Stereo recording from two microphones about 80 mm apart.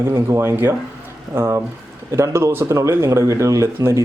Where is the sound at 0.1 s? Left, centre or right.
Right.